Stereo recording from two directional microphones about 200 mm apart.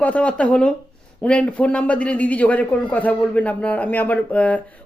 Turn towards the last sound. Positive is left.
turn(degrees=5)  # may be behind; listen again after turning